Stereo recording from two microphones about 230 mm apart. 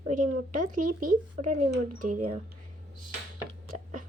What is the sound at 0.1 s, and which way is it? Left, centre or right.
Speech, right.